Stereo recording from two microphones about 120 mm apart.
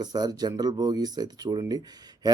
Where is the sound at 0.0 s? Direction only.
35° right (ahead or behind).